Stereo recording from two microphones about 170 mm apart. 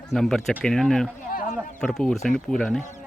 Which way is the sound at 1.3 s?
55° left (ahead or behind).